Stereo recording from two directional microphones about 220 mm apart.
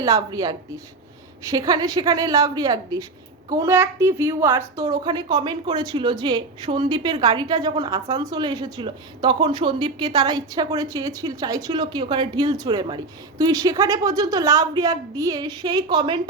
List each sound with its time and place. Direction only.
0.0 s a woman's voice: 15° right (ahead or behind)